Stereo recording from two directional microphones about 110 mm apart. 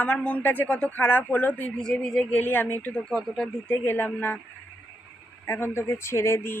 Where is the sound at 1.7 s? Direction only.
5° left (ahead or behind).